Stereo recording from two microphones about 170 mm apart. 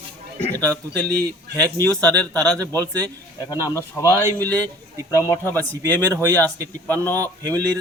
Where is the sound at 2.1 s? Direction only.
5° left (ahead or behind).